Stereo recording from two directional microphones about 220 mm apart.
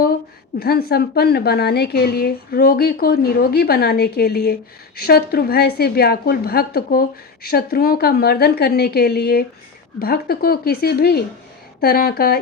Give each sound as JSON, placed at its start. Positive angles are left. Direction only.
{"t": 0.6, "sound": "a woman's voice", "side_deg": 45}